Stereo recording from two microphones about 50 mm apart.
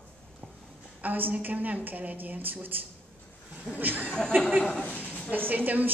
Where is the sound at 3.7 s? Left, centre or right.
Right.